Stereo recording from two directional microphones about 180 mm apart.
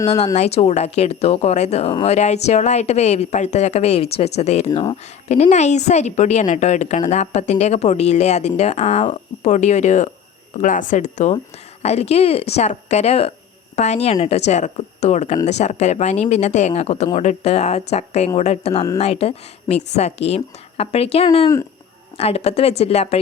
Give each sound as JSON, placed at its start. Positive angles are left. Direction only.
{"t": 0.3, "sound": "a woman's voice", "side_deg": 35}